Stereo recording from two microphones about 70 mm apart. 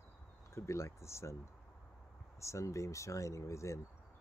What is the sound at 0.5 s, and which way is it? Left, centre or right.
Speech, left.